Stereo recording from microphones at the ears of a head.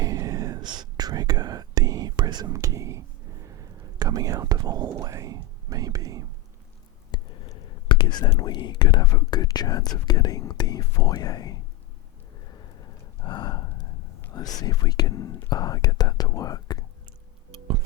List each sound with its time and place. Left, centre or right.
0.0 s whispering: right
3.5 s speech: right
7.1 s speech: left
12.5 s a sound: left